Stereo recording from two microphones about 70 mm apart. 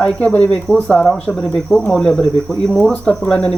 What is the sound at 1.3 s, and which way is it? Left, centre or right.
Cricket, centre.